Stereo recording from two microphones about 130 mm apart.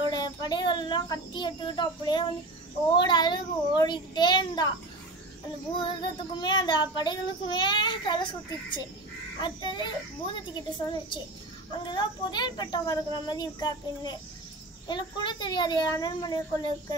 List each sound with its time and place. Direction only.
0.1 s child singing: 30° left (ahead or behind)
5.8 s child singing: 40° left (ahead or behind)